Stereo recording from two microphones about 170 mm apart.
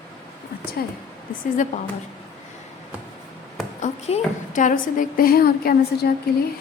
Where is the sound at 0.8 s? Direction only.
60° left (ahead or behind).